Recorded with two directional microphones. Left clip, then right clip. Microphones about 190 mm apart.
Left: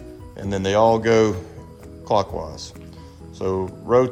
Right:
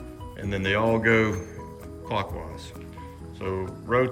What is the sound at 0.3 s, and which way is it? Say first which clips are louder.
Speech: left 7 dB; 15° left (ahead or behind).